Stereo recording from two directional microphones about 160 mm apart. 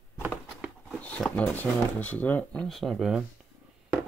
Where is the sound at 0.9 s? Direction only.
5° left (ahead or behind).